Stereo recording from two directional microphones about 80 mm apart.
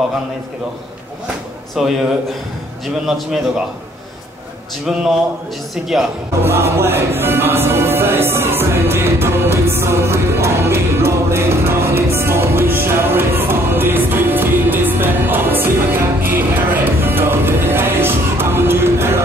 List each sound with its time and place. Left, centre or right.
1.8 s a man's voice: centre
3.1 s a man's voice: centre
6.4 s music: right